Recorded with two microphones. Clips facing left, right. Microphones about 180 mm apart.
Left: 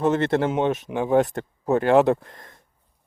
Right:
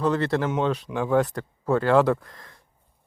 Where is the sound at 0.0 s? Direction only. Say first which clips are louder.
Left 3 dB; 25° left (ahead or behind).